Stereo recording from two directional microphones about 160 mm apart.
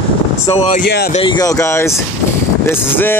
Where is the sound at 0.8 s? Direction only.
85° left.